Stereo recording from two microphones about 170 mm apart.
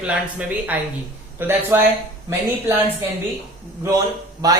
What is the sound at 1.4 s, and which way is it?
Speech, 10° right (ahead or behind).